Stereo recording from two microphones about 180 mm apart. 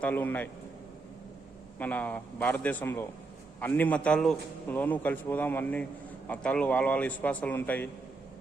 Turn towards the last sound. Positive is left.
turn(degrees=10)  # may be behind; listen again after turning